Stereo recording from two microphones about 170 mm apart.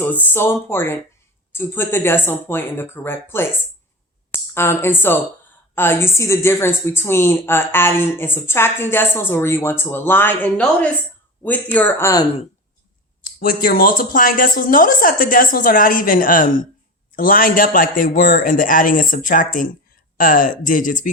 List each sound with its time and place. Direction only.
0.0 s a woman's voice: 10° left (ahead or behind)
13.2 s a woman's voice: 55° left (ahead or behind)